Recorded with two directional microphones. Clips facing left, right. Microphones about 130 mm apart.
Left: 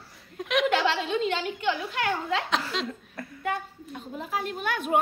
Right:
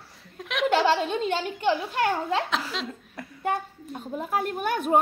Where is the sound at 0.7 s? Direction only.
40° right (ahead or behind).